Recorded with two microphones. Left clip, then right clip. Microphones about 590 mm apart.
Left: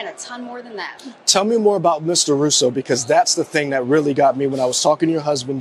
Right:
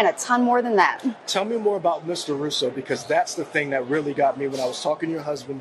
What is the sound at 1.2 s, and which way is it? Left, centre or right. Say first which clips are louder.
Speech: left 9 dB; left.